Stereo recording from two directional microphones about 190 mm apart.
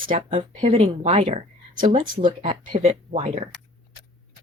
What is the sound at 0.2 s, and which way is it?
Speech, 30° right (ahead or behind).